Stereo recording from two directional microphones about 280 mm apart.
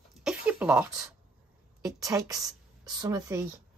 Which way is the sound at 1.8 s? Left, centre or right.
Centre.